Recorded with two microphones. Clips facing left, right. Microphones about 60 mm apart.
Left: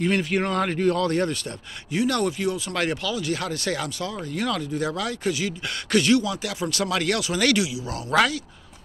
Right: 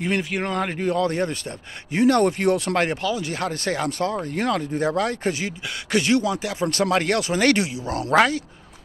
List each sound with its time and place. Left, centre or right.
0.0 s speech: centre
1.9 s speech: right
2.3 s speech: right
2.7 s speech: right
5.9 s speech: right